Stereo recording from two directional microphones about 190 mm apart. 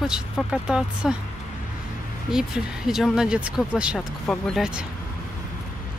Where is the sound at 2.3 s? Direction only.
Centre (ahead or behind).